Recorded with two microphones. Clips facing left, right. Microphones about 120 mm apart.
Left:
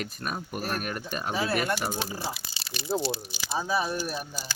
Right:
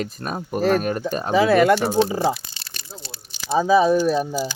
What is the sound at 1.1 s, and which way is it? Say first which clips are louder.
Speech: right 7 dB; 35° right (ahead or behind).